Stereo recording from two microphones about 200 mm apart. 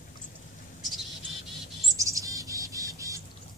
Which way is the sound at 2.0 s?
15° right (ahead or behind).